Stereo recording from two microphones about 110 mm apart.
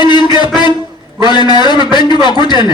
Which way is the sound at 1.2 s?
40° left (ahead or behind).